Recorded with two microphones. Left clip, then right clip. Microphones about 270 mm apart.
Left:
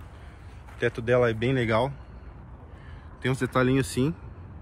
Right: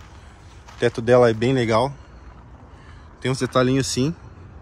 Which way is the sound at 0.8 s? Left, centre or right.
Centre.